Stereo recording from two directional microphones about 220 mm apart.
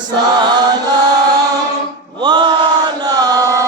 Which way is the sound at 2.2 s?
20° right (ahead or behind).